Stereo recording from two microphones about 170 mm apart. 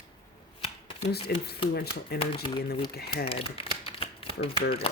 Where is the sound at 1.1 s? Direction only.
70° left (ahead or behind).